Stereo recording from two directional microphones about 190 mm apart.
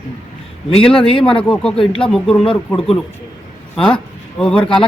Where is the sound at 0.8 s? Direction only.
5° left (ahead or behind).